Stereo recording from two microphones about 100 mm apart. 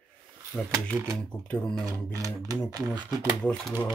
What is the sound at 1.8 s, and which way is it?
Speech, 35° right (ahead or behind).